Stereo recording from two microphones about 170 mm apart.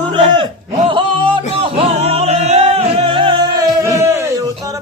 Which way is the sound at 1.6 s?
35° right (ahead or behind).